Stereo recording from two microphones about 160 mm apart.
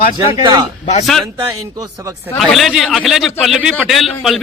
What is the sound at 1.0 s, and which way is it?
Speech, centre (ahead or behind).